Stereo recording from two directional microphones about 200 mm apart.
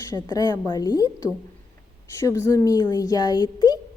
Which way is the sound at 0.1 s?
20° left (ahead or behind).